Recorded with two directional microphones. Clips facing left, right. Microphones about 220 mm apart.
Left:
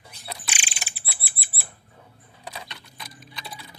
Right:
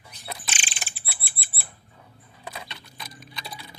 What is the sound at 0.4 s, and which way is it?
Bird, 10° left (ahead or behind).